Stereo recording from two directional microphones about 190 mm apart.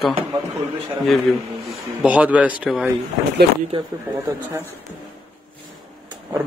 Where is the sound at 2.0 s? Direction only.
5° right (ahead or behind).